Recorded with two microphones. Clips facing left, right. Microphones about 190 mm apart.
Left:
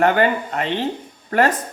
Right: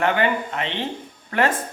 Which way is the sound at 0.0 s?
40° left (ahead or behind).